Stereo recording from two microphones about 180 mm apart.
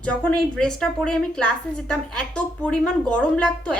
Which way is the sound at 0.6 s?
5° left (ahead or behind).